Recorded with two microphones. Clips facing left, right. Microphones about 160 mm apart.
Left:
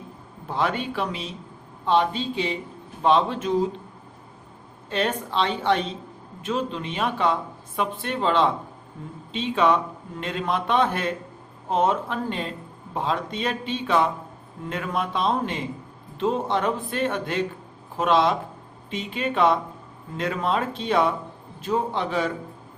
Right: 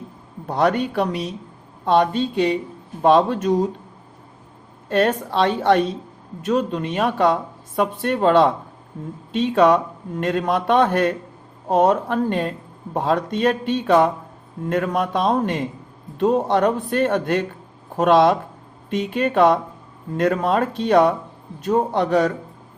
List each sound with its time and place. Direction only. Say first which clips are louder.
0.4 s speech: right 6 dB; 45° right (ahead or behind)
4.9 s speech: right 7 dB; 50° right (ahead or behind)